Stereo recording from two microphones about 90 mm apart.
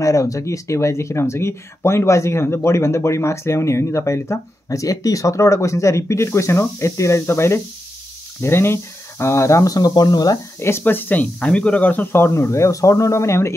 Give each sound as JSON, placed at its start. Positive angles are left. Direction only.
{"t": 0.0, "sound": "speech", "side_deg": 35}
{"t": 10.6, "sound": "speech", "side_deg": 25}